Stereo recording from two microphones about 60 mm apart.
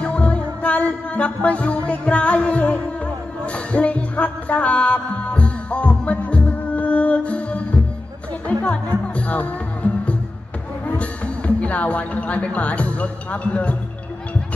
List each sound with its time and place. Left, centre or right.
0.0 s music: left
11.0 s speech: left